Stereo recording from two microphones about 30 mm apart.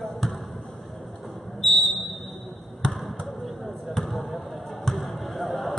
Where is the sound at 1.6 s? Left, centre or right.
Centre.